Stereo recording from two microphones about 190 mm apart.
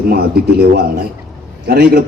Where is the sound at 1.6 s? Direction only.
55° right (ahead or behind).